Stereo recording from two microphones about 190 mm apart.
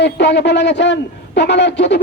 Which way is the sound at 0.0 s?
65° left (ahead or behind).